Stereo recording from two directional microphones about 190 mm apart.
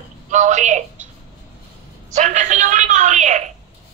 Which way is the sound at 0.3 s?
40° right (ahead or behind).